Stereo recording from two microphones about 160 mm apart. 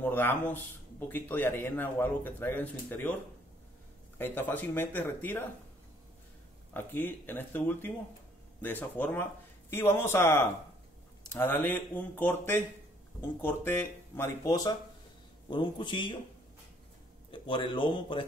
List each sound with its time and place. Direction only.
0.0 s speech: 15° left (ahead or behind)
4.2 s speech: 10° left (ahead or behind)
6.7 s a man's voice: 15° left (ahead or behind); by 16.2 s 30° left (ahead or behind)
17.3 s speech: 30° left (ahead or behind)